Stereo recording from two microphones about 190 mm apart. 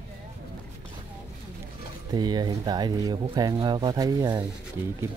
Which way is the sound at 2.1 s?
20° right (ahead or behind).